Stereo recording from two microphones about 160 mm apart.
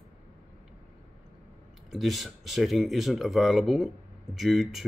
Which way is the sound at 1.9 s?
Centre (ahead or behind).